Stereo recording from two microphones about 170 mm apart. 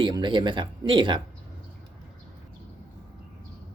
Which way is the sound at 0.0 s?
25° right (ahead or behind).